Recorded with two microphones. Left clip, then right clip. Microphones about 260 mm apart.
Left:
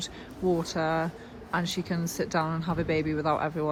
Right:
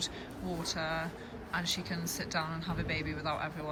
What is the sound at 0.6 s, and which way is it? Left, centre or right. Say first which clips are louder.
Speech: left 7 dB; centre.